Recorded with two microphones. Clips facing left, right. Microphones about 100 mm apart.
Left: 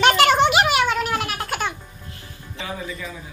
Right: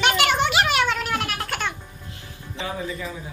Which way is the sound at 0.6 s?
5° left (ahead or behind).